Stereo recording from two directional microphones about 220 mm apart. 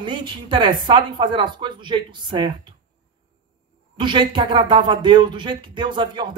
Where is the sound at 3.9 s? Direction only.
20° right (ahead or behind).